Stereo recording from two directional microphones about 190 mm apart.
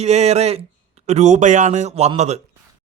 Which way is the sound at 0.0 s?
35° right (ahead or behind).